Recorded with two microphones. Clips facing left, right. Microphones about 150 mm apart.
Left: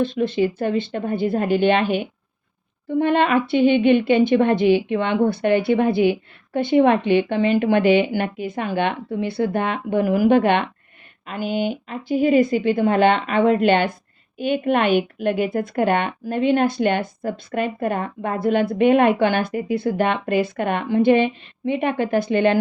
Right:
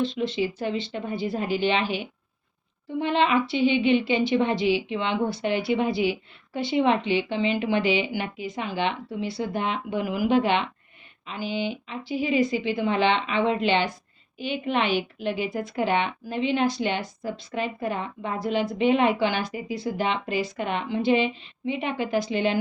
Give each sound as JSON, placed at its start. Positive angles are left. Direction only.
{"t": 0.0, "sound": "a woman's voice", "side_deg": 50}